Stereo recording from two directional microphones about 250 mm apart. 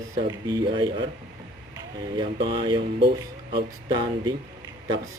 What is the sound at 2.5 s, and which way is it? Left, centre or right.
Speech, centre.